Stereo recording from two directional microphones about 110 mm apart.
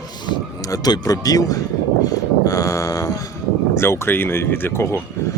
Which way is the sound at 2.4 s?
30° left (ahead or behind).